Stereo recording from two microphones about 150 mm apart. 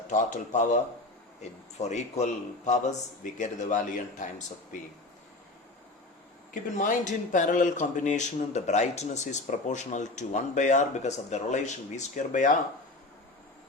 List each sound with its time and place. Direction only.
0.1 s a man's voice: 55° left (ahead or behind)
6.5 s speech: 60° left (ahead or behind)